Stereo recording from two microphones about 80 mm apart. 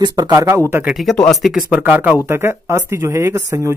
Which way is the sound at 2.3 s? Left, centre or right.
Right.